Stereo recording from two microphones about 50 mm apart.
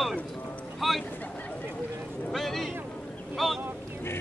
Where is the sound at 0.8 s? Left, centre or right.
Centre.